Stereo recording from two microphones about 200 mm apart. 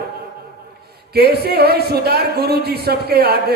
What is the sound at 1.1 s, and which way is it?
A man's voice, 50° right (ahead or behind).